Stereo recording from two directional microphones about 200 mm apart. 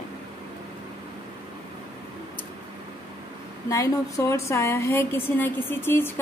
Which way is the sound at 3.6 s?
15° left (ahead or behind).